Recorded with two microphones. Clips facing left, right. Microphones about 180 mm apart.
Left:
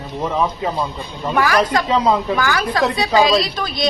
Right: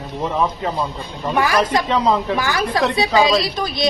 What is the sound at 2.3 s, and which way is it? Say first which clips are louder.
Speech: left 2 dB; 25° right (ahead or behind).